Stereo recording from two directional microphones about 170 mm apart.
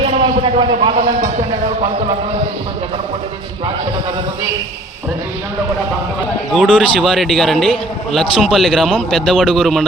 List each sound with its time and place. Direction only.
0.0 s a man's voice: 30° right (ahead or behind)
6.5 s a man's voice: centre (ahead or behind)